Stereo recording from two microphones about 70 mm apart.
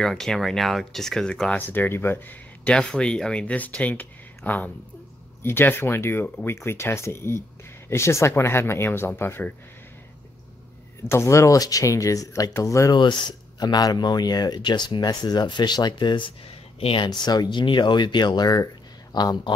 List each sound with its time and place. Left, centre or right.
0.0 s speech: centre
1.5 s speech: left
2.7 s speech: centre; by 9.5 s left
11.1 s speech: left
12.9 s speech: left
15.0 s speech: left
19.1 s speech: left